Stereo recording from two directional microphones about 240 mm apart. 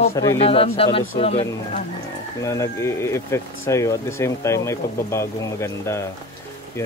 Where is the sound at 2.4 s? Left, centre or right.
Centre.